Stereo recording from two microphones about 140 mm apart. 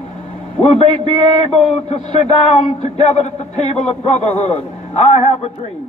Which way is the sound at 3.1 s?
50° left (ahead or behind).